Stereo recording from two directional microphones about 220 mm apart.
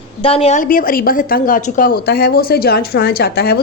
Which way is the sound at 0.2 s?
25° left (ahead or behind).